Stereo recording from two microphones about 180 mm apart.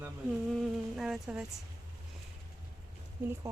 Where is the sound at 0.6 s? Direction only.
Centre (ahead or behind).